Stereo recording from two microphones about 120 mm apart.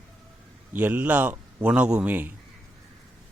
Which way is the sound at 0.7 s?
15° right (ahead or behind).